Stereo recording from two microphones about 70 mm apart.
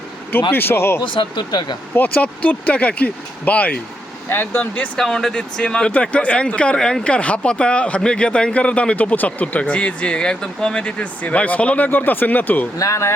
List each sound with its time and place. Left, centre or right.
0.3 s speech: left
1.4 s speech: left
2.0 s speech: left
4.3 s speech: left
4.9 s speech: centre; by 12.6 s left
12.7 s speech: left